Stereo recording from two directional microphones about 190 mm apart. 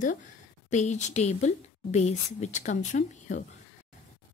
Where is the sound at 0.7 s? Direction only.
40° left (ahead or behind).